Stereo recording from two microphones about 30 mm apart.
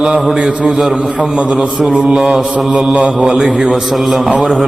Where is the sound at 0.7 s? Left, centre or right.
Centre.